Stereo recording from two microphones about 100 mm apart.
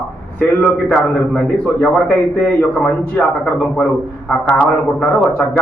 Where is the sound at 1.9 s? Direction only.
15° left (ahead or behind).